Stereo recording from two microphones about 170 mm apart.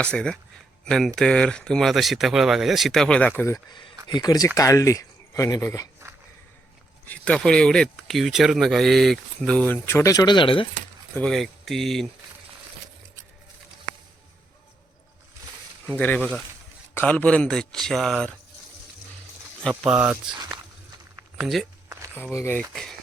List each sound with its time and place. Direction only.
0.0 s speech: 5° left (ahead or behind)
7.1 s speech: 5° left (ahead or behind); by 10.7 s 30° left (ahead or behind)
11.1 s speech: 5° left (ahead or behind)
15.9 s speech: 10° left (ahead or behind)
19.8 s speech: 10° right (ahead or behind)
21.3 s speech: centre (ahead or behind)
22.1 s speech: 15° left (ahead or behind)
22.7 s speech: centre (ahead or behind)